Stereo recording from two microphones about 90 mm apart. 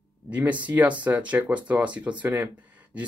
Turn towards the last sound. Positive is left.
turn(degrees=-15)  # may be behind; listen again after turning